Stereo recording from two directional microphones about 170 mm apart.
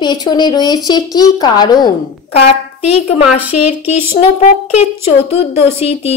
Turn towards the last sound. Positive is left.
turn(degrees=35)  # may be behind; listen again after turning